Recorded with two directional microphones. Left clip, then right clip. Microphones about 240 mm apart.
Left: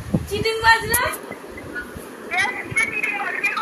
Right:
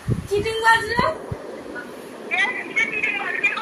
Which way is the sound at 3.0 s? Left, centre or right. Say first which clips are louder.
Right 1 dB; left.